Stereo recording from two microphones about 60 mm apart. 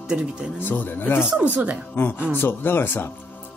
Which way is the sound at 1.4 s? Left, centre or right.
Right.